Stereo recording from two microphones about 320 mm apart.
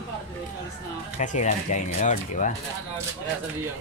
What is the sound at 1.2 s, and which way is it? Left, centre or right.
Speech, left.